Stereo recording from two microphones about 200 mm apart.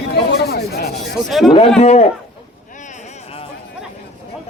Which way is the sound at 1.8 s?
35° left (ahead or behind).